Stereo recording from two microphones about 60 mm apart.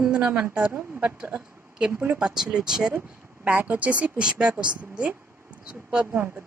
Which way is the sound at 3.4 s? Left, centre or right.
Right.